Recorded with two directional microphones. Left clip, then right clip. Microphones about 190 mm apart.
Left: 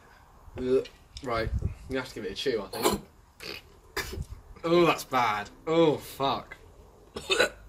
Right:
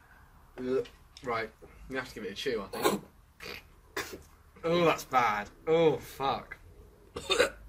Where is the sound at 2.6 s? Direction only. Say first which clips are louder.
Left 2 dB; 15° right (ahead or behind).